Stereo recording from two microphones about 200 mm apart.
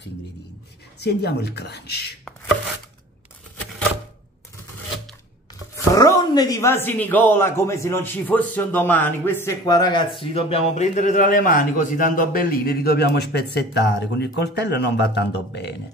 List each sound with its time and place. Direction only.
1.0 s speech: 55° left (ahead or behind)
5.9 s speech: 20° left (ahead or behind)
10.2 s a man's voice: 30° left (ahead or behind); by 15.7 s 60° left (ahead or behind)